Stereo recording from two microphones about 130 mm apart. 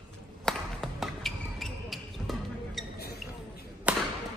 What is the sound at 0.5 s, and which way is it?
Basketball bounce, centre (ahead or behind).